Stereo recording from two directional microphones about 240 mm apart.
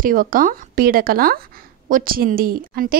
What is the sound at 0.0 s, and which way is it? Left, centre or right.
A woman's voice, right.